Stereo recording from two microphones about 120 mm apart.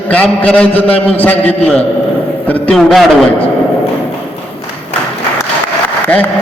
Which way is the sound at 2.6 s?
Centre (ahead or behind).